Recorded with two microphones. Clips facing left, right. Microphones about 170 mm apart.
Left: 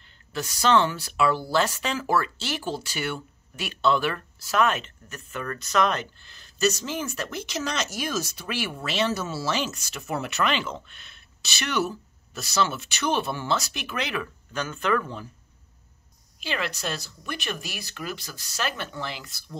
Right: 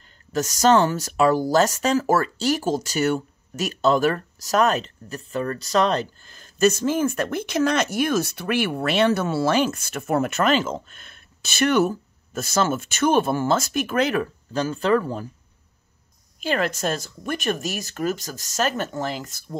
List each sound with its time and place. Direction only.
0.3 s speech: 40° right (ahead or behind)
16.3 s speech: 45° right (ahead or behind)